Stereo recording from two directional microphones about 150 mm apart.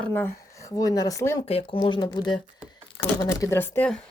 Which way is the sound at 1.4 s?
35° left (ahead or behind).